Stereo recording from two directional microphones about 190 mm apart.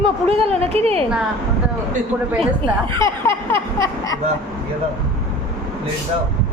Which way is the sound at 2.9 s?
15° left (ahead or behind).